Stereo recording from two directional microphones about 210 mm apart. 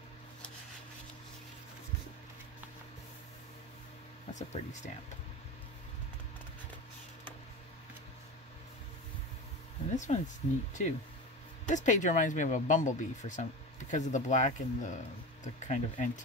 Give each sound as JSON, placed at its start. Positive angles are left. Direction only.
{"t": 4.3, "sound": "speech", "side_deg": 35}
{"t": 9.9, "sound": "speech", "side_deg": 35}